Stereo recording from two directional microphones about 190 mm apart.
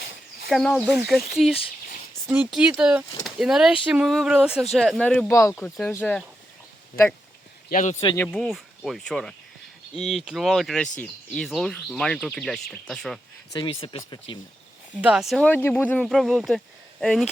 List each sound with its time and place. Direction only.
0.5 s speech: centre (ahead or behind)
7.7 s speech: 40° left (ahead or behind)
8.0 s speech: 10° left (ahead or behind)
13.5 s speech: 25° left (ahead or behind)
15.0 s speech: centre (ahead or behind)